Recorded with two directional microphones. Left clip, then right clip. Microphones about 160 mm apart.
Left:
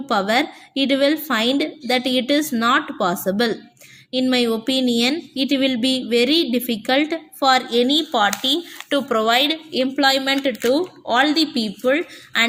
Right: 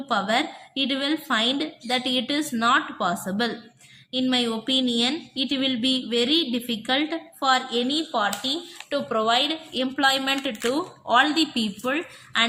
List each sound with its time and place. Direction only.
0.0 s a woman's voice: 30° left (ahead or behind)